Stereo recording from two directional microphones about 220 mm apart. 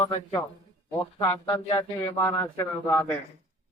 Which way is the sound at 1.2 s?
15° left (ahead or behind).